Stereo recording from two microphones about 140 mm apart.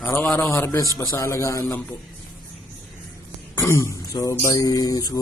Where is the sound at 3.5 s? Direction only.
20° left (ahead or behind).